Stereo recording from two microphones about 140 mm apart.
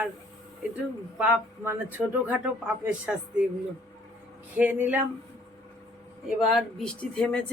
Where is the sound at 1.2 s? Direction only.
10° right (ahead or behind).